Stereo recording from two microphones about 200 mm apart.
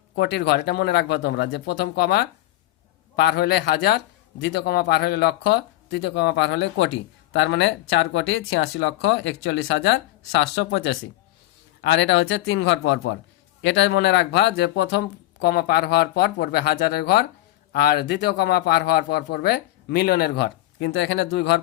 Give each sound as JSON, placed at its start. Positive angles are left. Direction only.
{"t": 0.2, "sound": "a man's voice", "side_deg": 60}